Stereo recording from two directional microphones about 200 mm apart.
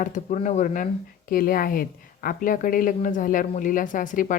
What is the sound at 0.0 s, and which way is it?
A woman's voice, 35° left (ahead or behind).